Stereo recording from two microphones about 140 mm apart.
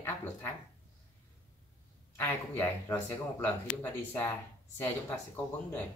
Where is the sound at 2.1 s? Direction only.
15° left (ahead or behind).